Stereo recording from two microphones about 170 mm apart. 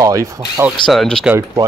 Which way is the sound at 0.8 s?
5° left (ahead or behind).